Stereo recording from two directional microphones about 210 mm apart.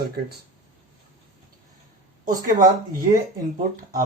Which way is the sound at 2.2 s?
40° right (ahead or behind).